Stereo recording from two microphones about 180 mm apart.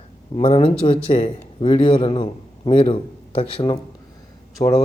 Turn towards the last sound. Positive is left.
turn(degrees=35)  # may be behind; listen again after turning